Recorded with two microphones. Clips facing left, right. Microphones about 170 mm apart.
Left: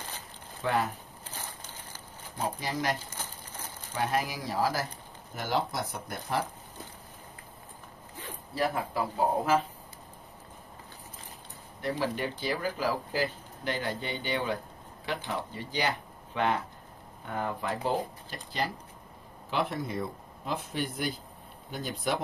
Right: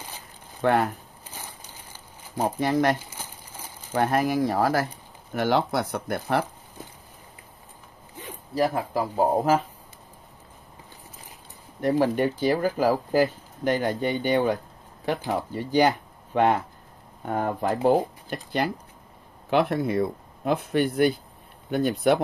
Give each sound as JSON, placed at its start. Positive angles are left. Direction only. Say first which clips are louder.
{"t": 0.6, "sound": "speech", "louder": "right 7 dB", "side_deg": -60}
{"t": 1.3, "sound": "a sound", "louder": "right 1 dB", "side_deg": -10}
{"t": 2.4, "sound": "speech", "louder": "right 9 dB", "side_deg": -60}
{"t": 3.1, "sound": "crumpling", "louder": "right 1 dB", "side_deg": -10}
{"t": 3.9, "sound": "speech", "louder": "right 8 dB", "side_deg": -55}
{"t": 8.5, "sound": "speech", "louder": "right 6 dB", "side_deg": -40}
{"t": 12.0, "sound": "speech", "louder": "right 10 dB", "side_deg": -45}
{"t": 17.2, "sound": "speech", "louder": "right 7 dB", "side_deg": -50}